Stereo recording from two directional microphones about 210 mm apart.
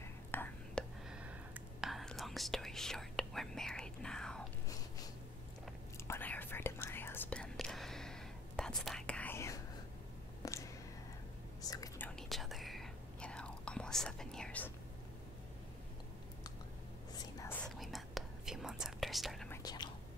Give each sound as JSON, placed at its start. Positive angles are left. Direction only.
{"t": 0.3, "sound": "whispering", "side_deg": 10}
{"t": 1.1, "sound": "whispering", "side_deg": -5}
{"t": 6.0, "sound": "whispering", "side_deg": 10}
{"t": 10.4, "sound": "a sound", "side_deg": 15}
{"t": 11.6, "sound": "whispering", "side_deg": 15}
{"t": 12.2, "sound": "whispering", "side_deg": 0}
{"t": 17.6, "sound": "whispering", "side_deg": 0}
{"t": 19.5, "sound": "whispering", "side_deg": 20}